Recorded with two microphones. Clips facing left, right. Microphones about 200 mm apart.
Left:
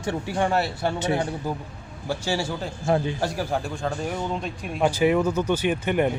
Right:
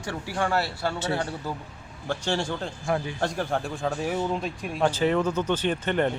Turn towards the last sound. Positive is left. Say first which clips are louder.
# left 2 dB
turn(degrees=10)  # may be behind; listen again after turning